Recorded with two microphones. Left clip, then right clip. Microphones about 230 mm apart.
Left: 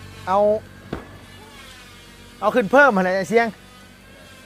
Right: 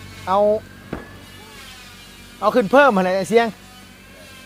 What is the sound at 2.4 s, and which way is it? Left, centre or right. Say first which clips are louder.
Speech: right 1 dB; centre.